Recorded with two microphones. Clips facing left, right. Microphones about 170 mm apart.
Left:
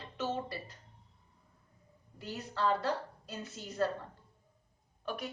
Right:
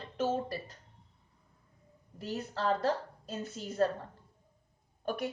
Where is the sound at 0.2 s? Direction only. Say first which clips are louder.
Right 4 dB; 45° right (ahead or behind).